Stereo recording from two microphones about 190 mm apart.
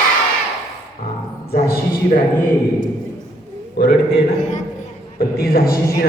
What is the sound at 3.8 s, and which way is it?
Speech, 65° left (ahead or behind).